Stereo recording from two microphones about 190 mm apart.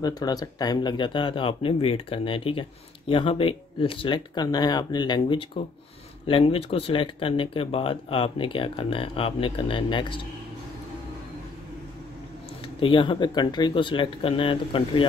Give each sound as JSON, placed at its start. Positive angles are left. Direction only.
{"t": 0.0, "sound": "speech", "side_deg": 20}
{"t": 12.8, "sound": "speech", "side_deg": 25}